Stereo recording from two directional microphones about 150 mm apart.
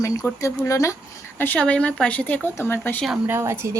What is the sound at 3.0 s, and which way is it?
Speech, 15° right (ahead or behind).